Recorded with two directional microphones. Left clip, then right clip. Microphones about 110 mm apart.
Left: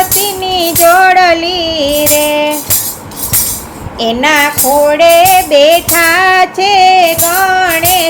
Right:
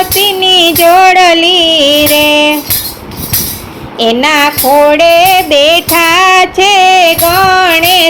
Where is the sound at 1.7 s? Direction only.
60° right (ahead or behind).